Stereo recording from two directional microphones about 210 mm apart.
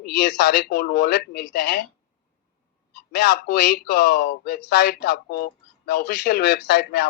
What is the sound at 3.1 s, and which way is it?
Speech, 45° left (ahead or behind).